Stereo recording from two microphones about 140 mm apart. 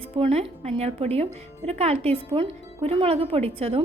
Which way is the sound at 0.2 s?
45° right (ahead or behind).